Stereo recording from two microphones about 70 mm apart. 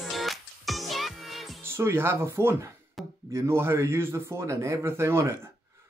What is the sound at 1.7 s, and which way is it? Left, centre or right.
A man's voice, right.